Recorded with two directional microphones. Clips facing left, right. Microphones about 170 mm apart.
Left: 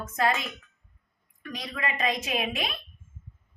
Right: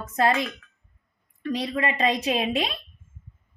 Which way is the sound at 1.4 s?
30° right (ahead or behind).